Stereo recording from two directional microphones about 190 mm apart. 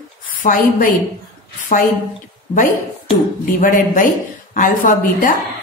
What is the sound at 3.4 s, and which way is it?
Speech, 45° left (ahead or behind).